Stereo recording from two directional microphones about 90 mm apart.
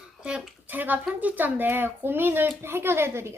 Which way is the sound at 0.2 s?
10° right (ahead or behind).